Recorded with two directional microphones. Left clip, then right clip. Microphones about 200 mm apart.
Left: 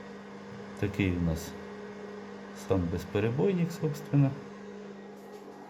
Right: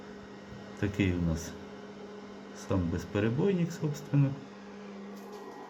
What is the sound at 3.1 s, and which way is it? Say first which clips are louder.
Speech: left 1 dB; 20° left (ahead or behind).